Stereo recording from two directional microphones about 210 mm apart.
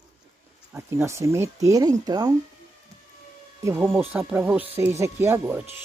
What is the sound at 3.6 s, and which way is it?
Speech, 10° right (ahead or behind).